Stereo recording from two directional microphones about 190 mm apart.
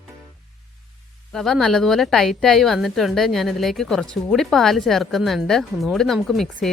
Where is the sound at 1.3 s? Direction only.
Centre (ahead or behind).